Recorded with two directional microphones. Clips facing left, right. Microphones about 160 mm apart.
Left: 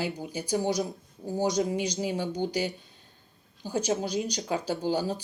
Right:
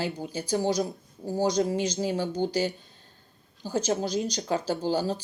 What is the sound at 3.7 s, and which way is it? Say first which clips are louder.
Speech: right 1 dB; 15° left (ahead or behind).